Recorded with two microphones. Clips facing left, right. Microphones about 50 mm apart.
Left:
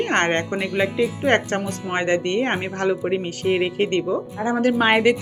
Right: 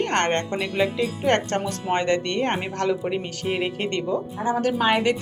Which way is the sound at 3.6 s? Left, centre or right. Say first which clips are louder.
Left 5 dB; centre.